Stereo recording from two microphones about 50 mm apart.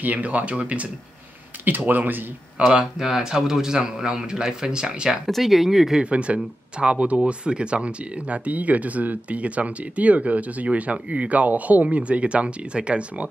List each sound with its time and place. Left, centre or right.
0.0 s speech: right
1.6 s speech: right
2.8 s a man's voice: centre
5.2 s speech: centre
6.0 s speech: right